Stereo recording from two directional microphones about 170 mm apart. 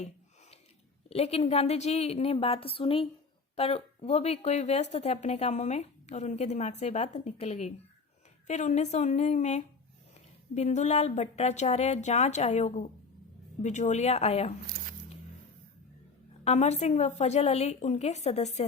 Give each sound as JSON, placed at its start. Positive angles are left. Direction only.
{"t": 1.1, "sound": "a woman's voice", "side_deg": 40}
{"t": 16.4, "sound": "speech", "side_deg": 40}